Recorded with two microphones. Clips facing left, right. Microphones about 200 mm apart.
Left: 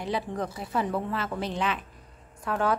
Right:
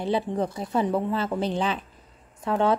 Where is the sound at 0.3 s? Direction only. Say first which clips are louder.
Right 5 dB; 25° right (ahead or behind).